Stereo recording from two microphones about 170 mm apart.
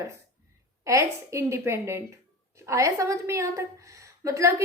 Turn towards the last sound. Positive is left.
turn(degrees=-15)  # may be behind; listen again after turning